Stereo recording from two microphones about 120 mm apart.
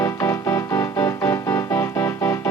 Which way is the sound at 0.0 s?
30° left (ahead or behind).